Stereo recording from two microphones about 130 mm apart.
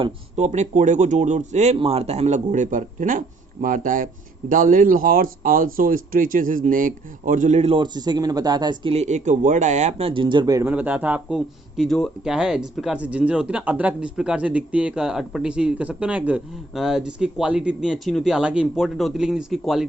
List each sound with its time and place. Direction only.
0.3 s speech: 60° right (ahead or behind)
7.7 s speech: 35° right (ahead or behind)
9.0 s speech: 65° right (ahead or behind); by 10.7 s 25° right (ahead or behind)
10.7 s speech: 10° right (ahead or behind)
11.3 s speech: centre (ahead or behind)